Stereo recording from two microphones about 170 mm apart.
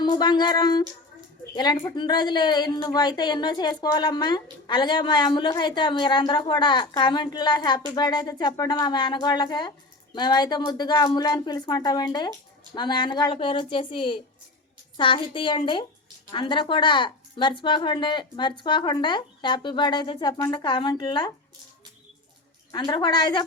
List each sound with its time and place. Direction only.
0.0 s a sound: 25° left (ahead or behind)
2.0 s a woman's voice: 25° left (ahead or behind)
22.7 s a woman's voice: 25° left (ahead or behind)